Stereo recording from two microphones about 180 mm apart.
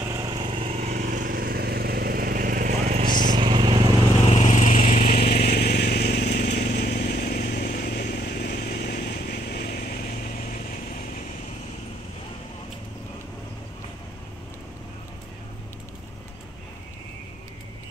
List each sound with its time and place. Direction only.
0.0 s vehicle: 20° right (ahead or behind); by 3.1 s 45° right (ahead or behind)
3.3 s vehicle: 25° right (ahead or behind)
4.3 s vehicle: 40° left (ahead or behind)